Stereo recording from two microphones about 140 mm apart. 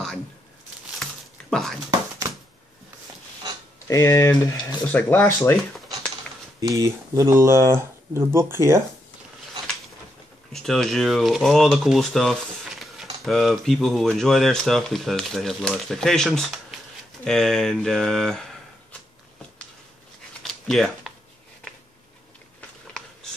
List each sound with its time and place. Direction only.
1.5 s speech: centre (ahead or behind)
3.8 s speech: 20° left (ahead or behind)
4.8 s speech: 10° left (ahead or behind)
6.6 s speech: 25° right (ahead or behind)
10.5 s speech: 5° left (ahead or behind)
20.4 s a sound: centre (ahead or behind)